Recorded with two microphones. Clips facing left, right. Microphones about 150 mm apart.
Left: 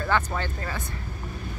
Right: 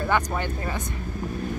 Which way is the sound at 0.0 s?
15° right (ahead or behind).